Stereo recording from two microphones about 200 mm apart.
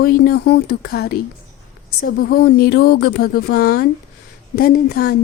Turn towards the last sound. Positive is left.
turn(degrees=50)  # may be behind; listen again after turning